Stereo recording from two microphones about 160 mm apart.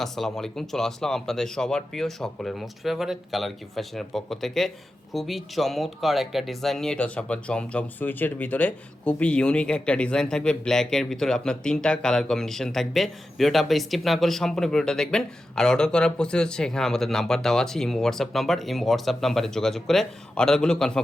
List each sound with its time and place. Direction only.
0.0 s speech: centre (ahead or behind)